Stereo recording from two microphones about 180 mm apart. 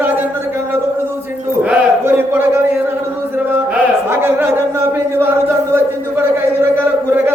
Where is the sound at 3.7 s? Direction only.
15° right (ahead or behind).